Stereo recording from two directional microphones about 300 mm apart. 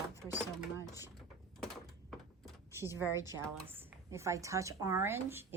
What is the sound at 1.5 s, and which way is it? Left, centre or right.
Door, centre.